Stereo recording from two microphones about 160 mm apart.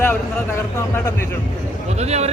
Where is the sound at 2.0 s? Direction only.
40° right (ahead or behind).